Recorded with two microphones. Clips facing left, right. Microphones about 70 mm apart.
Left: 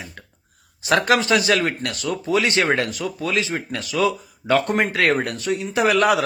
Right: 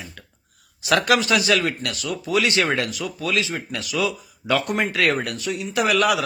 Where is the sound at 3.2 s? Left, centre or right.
Left.